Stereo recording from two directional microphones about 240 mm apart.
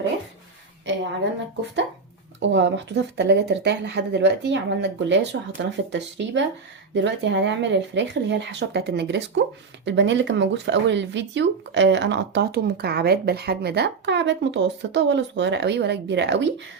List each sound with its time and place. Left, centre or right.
0.9 s speech: right
2.4 s speech: right